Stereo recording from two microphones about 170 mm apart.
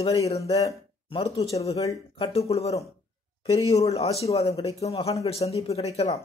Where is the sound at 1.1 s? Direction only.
30° left (ahead or behind).